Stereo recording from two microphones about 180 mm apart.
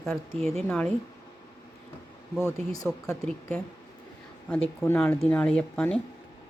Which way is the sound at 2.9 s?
Centre (ahead or behind).